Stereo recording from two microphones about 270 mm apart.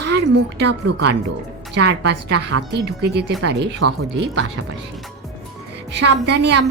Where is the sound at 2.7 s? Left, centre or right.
Right.